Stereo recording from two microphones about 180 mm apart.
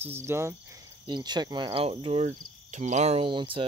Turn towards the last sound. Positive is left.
turn(degrees=-30)  # may be behind; listen again after turning